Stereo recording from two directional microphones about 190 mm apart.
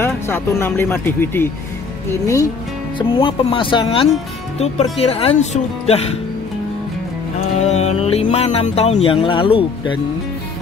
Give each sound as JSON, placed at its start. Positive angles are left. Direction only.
{"t": 0.0, "sound": "speech", "side_deg": 10}
{"t": 3.0, "sound": "speech", "side_deg": 25}
{"t": 7.5, "sound": "speech", "side_deg": 35}